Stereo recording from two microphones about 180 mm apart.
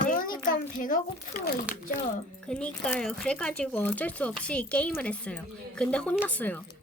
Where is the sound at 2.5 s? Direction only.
5° left (ahead or behind).